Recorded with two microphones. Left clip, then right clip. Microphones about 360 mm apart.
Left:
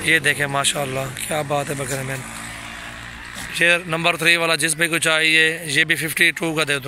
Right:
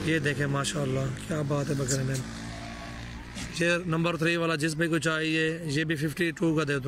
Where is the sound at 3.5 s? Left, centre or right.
Centre.